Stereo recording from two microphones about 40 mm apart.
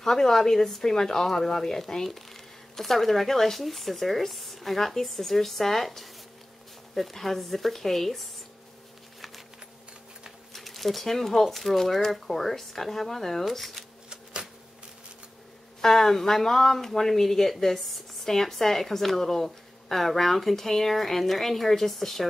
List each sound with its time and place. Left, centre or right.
0.0 s speech: centre
10.5 s speech: centre
14.0 s typewriter: right
15.8 s speech: centre